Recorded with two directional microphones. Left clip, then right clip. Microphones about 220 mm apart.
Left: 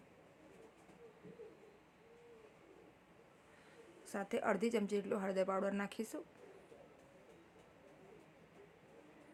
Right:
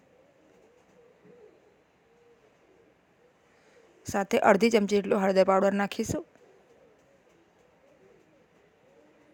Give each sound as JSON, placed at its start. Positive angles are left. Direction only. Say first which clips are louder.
{"t": 4.0, "sound": "speech", "louder": "right 16 dB", "side_deg": -40}